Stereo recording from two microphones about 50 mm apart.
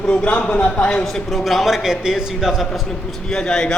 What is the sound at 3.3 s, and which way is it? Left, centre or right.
Speech, centre.